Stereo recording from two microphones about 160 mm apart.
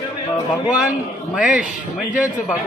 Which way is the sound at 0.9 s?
5° right (ahead or behind).